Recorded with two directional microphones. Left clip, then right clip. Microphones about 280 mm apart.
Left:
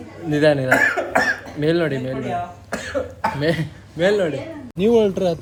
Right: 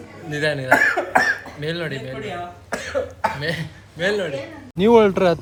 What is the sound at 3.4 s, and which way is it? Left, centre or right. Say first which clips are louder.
Speech: left 5 dB; left.